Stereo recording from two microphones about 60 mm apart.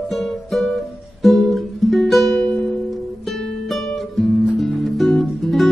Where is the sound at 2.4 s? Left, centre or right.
Centre.